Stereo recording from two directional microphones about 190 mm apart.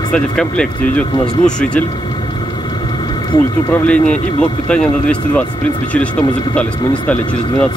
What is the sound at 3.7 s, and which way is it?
A man's voice, 5° left (ahead or behind).